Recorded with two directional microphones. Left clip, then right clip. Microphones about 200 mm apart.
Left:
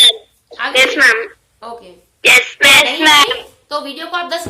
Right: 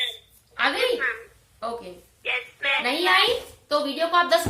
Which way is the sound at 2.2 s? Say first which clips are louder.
Left 19 dB; 60° left (ahead or behind).